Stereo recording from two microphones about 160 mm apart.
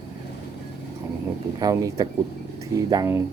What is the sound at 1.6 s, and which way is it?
Speech, 20° right (ahead or behind).